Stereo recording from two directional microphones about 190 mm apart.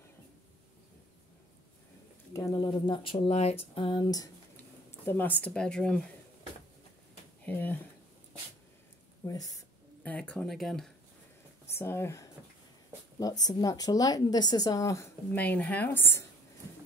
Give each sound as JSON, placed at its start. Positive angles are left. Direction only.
{"t": 2.3, "sound": "a woman's voice", "side_deg": 20}
{"t": 5.0, "sound": "speech", "side_deg": 10}
{"t": 7.4, "sound": "speech", "side_deg": 10}
{"t": 9.2, "sound": "speech", "side_deg": 20}
{"t": 10.0, "sound": "speech", "side_deg": 5}
{"t": 11.6, "sound": "a woman's voice", "side_deg": 15}